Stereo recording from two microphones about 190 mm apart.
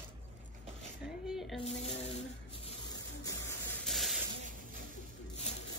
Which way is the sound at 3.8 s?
Centre (ahead or behind).